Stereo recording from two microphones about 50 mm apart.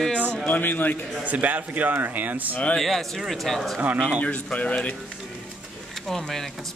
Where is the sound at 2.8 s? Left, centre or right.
Centre.